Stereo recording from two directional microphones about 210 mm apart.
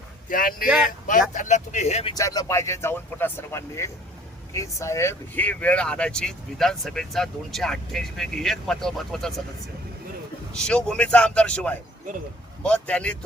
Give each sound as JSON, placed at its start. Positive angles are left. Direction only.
{"t": 0.3, "sound": "speech", "side_deg": 40}
{"t": 2.1, "sound": "speech", "side_deg": 15}
{"t": 10.5, "sound": "speech", "side_deg": 5}